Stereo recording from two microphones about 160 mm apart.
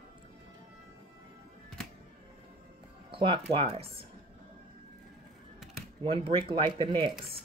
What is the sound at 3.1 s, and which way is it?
Speech, 30° right (ahead or behind).